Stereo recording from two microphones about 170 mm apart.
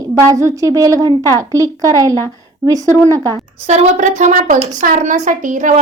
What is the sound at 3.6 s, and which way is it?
A woman's voice, 45° right (ahead or behind).